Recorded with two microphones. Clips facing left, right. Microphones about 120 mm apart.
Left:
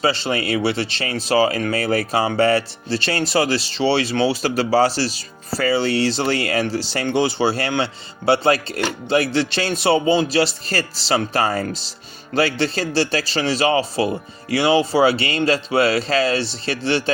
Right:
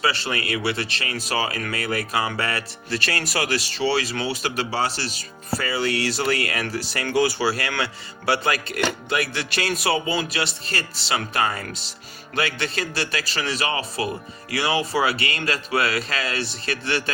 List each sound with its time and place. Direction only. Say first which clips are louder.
0.0 s speech: left 5 dB; 25° left (ahead or behind)